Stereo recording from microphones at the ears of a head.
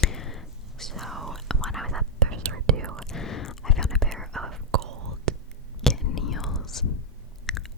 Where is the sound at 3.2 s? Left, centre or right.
Left.